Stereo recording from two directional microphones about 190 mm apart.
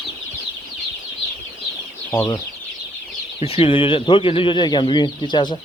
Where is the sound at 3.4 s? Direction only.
30° left (ahead or behind).